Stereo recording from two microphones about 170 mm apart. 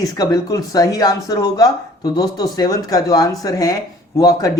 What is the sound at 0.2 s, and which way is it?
A man's voice, 20° left (ahead or behind).